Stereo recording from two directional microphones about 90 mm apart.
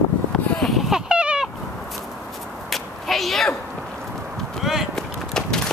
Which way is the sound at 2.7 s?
Centre (ahead or behind).